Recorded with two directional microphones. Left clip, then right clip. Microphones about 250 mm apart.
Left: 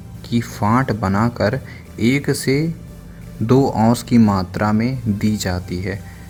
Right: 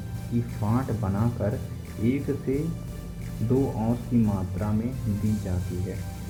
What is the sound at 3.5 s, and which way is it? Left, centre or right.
Speech, left.